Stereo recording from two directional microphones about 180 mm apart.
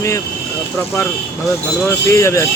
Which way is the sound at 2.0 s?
15° left (ahead or behind).